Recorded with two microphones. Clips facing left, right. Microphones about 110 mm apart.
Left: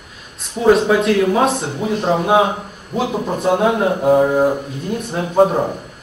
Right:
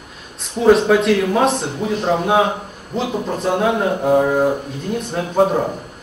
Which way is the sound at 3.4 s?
5° left (ahead or behind).